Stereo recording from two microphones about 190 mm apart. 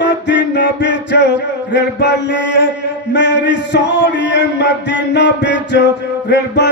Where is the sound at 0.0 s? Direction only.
70° left (ahead or behind).